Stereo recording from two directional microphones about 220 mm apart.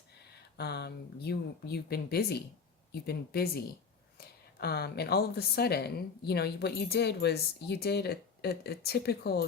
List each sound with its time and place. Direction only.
0.5 s speech: 50° left (ahead or behind)